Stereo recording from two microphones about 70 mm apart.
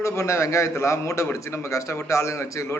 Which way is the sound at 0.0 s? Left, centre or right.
Left.